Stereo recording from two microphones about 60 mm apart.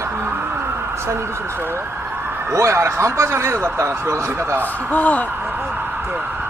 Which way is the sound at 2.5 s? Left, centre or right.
Right.